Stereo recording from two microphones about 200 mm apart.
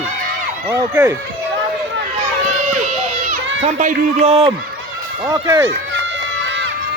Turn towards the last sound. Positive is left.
turn(degrees=-20)  # may be behind; listen again after turning